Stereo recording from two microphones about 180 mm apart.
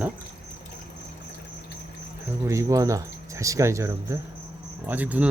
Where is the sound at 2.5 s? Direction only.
20° right (ahead or behind).